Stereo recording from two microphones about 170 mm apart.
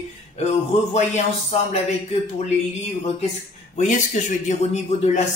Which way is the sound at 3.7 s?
45° left (ahead or behind).